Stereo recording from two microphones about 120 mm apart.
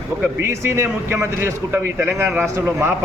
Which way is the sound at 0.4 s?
20° right (ahead or behind).